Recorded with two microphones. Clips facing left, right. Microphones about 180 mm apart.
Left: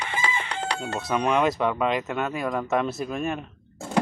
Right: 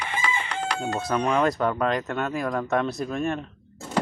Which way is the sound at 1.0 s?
Centre (ahead or behind).